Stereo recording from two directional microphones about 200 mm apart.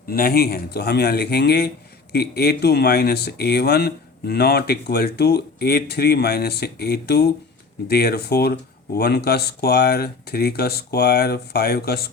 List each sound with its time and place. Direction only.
0.1 s speech: 50° left (ahead or behind)